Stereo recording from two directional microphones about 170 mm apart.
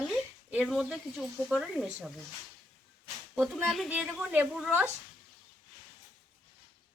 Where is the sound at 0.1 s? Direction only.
Centre (ahead or behind).